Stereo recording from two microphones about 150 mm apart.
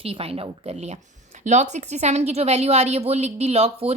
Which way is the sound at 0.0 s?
40° right (ahead or behind).